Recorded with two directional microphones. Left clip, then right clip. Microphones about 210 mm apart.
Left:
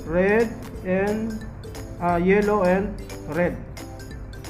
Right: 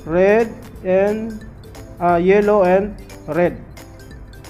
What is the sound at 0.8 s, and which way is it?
Speech, 45° right (ahead or behind).